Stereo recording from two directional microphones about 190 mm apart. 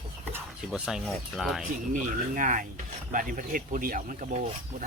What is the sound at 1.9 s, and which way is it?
Speech, 45° right (ahead or behind).